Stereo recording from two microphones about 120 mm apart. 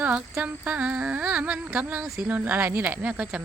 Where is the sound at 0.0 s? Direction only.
15° right (ahead or behind).